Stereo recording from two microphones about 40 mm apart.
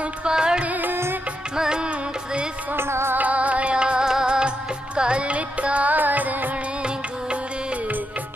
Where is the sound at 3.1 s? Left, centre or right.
Right.